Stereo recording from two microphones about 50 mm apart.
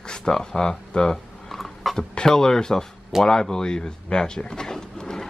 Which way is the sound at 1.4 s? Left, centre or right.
Centre.